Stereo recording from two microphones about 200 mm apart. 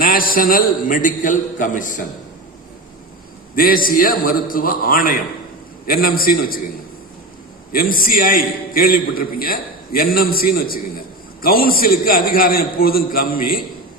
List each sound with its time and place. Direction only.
0.0 s a man's voice: 45° left (ahead or behind)
3.5 s a man's voice: 45° left (ahead or behind)
7.7 s a man's voice: 45° left (ahead or behind)